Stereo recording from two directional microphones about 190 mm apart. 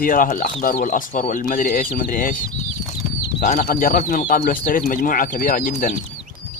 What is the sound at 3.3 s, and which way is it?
Speech, 50° left (ahead or behind).